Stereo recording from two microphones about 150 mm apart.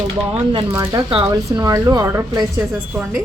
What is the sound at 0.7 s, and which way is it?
A woman's voice, 15° right (ahead or behind).